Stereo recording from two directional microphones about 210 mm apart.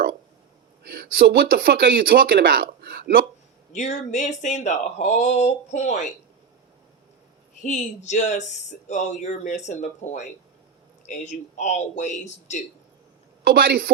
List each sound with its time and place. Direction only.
0.9 s speech: 45° right (ahead or behind)
3.7 s speech: 35° left (ahead or behind)
7.6 s speech: 35° left (ahead or behind)
13.4 s speech: 45° right (ahead or behind)